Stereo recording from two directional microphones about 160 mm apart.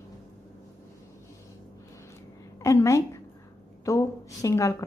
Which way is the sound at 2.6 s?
20° left (ahead or behind).